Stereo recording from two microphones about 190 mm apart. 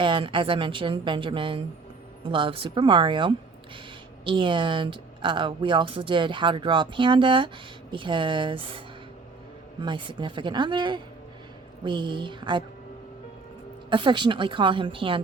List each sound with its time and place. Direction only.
0.0 s a woman's voice: 25° right (ahead or behind)
9.8 s a woman's voice: 25° right (ahead or behind)
13.9 s a woman's voice: 25° right (ahead or behind)